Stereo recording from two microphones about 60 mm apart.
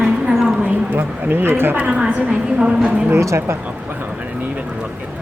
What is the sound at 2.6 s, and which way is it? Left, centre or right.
Speech, centre.